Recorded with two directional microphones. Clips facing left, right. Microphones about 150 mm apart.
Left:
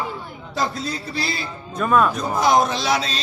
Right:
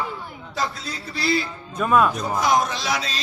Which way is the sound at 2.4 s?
30° left (ahead or behind).